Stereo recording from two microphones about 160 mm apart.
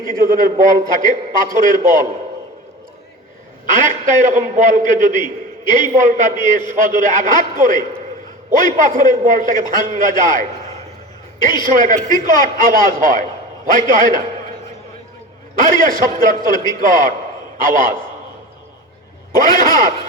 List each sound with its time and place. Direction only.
0.0 s a man's voice: 60° right (ahead or behind)
3.7 s a man's voice: 50° right (ahead or behind)
11.7 s a man's voice: 55° right (ahead or behind)
15.5 s a man's voice: 60° right (ahead or behind)
19.3 s a man's voice: 60° right (ahead or behind)